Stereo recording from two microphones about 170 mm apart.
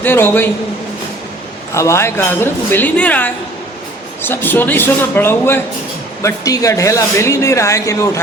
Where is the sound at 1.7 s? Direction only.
15° left (ahead or behind).